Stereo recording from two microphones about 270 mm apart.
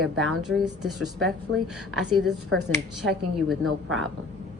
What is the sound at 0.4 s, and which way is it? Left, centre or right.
A woman's voice, centre.